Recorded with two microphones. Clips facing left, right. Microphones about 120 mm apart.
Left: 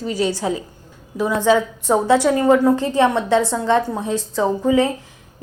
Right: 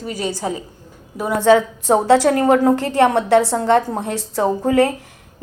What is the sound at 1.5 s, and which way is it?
A woman's voice, 70° right (ahead or behind).